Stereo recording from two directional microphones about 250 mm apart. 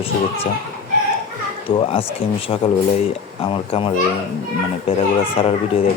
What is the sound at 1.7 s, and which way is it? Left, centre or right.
Speech, left.